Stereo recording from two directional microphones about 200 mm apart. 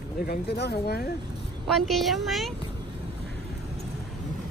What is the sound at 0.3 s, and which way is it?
Speech, 55° left (ahead or behind).